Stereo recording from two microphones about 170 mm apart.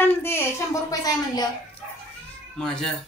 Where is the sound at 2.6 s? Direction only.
5° left (ahead or behind).